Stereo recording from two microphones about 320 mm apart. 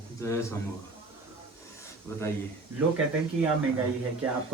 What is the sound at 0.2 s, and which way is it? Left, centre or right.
Speech, centre.